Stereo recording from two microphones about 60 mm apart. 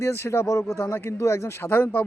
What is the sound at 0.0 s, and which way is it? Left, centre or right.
Speech, left.